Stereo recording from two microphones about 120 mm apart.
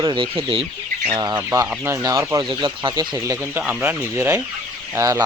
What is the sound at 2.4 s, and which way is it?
Speech, 45° right (ahead or behind).